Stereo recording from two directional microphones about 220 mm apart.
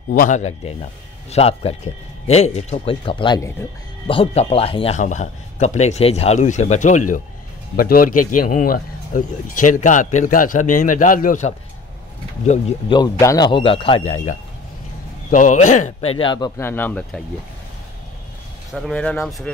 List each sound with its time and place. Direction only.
0.1 s a man's voice: 35° left (ahead or behind)
12.4 s speech: 25° left (ahead or behind)
15.3 s speech: 35° left (ahead or behind); by 17.2 s 10° left (ahead or behind)
18.7 s speech: centre (ahead or behind)